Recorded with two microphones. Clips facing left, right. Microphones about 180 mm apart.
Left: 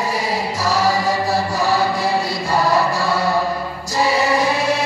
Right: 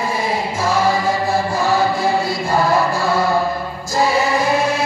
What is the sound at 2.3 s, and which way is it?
Choir, 35° left (ahead or behind).